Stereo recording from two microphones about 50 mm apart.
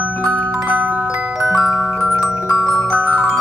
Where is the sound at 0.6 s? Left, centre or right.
Right.